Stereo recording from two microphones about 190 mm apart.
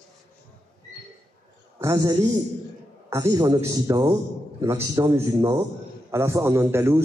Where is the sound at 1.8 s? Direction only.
20° right (ahead or behind).